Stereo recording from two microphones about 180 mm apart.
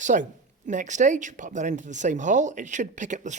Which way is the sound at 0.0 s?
45° right (ahead or behind).